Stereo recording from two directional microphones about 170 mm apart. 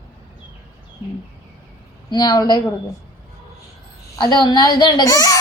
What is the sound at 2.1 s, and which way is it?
Speech, 25° left (ahead or behind).